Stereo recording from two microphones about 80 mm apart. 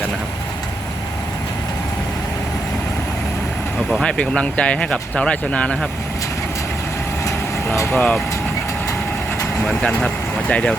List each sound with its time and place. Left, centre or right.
4.0 s speech: centre
7.9 s speech: centre
9.6 s speech: centre